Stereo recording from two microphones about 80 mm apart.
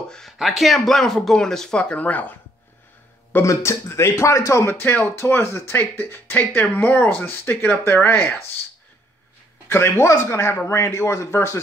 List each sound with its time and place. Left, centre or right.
0.1 s speech: centre
3.4 s speech: left
4.6 s speech: left
9.7 s speech: left